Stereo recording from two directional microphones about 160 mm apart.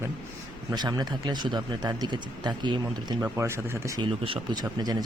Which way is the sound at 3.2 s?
15° right (ahead or behind).